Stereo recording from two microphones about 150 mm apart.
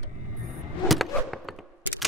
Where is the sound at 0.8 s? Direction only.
Centre (ahead or behind).